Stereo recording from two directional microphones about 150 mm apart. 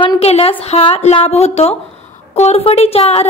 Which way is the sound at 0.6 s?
40° left (ahead or behind).